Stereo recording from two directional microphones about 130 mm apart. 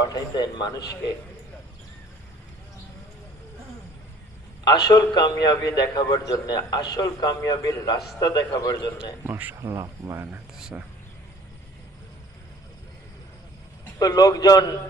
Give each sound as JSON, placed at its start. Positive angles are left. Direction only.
{"t": 0.0, "sound": "a man's voice", "side_deg": 30}
{"t": 4.6, "sound": "a man's voice", "side_deg": 30}
{"t": 9.2, "sound": "speech", "side_deg": -15}
{"t": 10.3, "sound": "a sound", "side_deg": -10}
{"t": 13.9, "sound": "a man's voice", "side_deg": 30}